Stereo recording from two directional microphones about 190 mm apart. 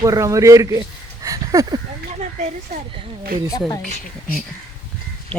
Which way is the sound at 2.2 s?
40° right (ahead or behind).